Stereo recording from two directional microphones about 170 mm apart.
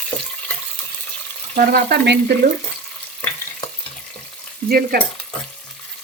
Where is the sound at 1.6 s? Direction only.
70° right (ahead or behind).